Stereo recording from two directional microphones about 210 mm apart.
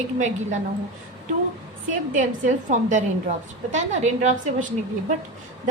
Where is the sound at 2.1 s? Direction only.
40° right (ahead or behind).